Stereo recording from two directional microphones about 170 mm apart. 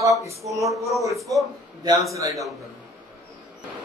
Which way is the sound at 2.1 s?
20° right (ahead or behind).